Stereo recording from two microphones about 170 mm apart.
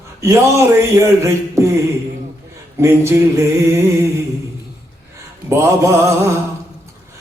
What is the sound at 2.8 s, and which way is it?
Music, 15° right (ahead or behind).